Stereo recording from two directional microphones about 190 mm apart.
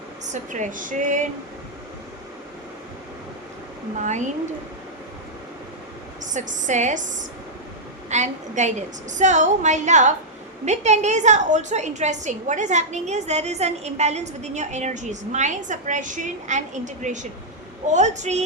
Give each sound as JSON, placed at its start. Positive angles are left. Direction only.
{"t": 0.3, "sound": "speech", "side_deg": -40}
{"t": 6.3, "sound": "a woman's voice", "side_deg": -40}